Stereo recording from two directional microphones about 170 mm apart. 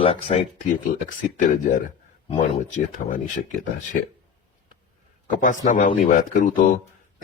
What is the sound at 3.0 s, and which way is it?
Speech, 55° left (ahead or behind).